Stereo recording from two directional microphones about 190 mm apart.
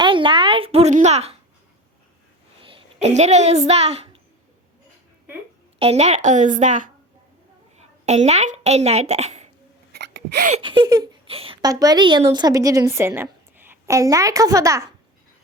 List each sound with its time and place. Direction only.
0.0 s a sound: 25° right (ahead or behind)
2.6 s a woman's voice: 30° right (ahead or behind)
5.8 s a woman's voice: 35° right (ahead or behind)
9.9 s gasp: 60° right (ahead or behind)
10.6 s a woman's voice: 25° right (ahead or behind)